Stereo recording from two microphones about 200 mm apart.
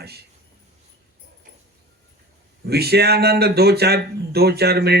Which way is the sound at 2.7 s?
55° right (ahead or behind).